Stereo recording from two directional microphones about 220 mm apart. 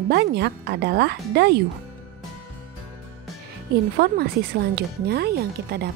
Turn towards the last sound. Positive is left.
turn(degrees=-45)  # may be behind; listen again after turning